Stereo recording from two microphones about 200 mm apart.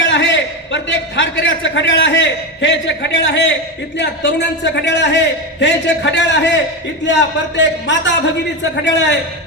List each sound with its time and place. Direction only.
0.0 s a man's voice: 65° left (ahead or behind)